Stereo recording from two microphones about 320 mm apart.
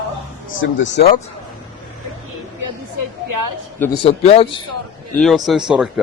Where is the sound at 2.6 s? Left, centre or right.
Right.